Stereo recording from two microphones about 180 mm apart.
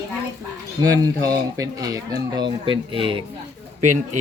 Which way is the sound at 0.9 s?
20° right (ahead or behind).